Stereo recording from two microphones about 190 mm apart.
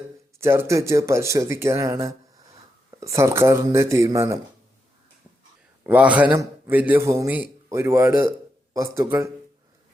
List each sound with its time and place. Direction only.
0.3 s speech: 15° right (ahead or behind)
5.8 s speech: 5° right (ahead or behind)